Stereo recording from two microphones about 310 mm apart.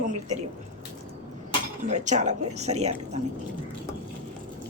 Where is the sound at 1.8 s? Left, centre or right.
Right.